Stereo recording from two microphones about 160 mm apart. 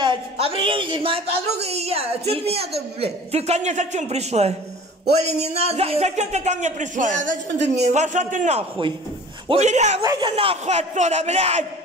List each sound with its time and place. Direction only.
0.0 s a woman's voice: 35° right (ahead or behind)